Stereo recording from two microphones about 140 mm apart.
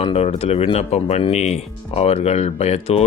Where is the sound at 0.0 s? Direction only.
45° left (ahead or behind).